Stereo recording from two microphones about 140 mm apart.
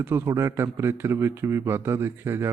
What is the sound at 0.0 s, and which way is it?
A man's voice, 15° right (ahead or behind).